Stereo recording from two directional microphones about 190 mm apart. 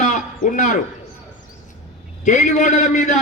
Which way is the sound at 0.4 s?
40° left (ahead or behind).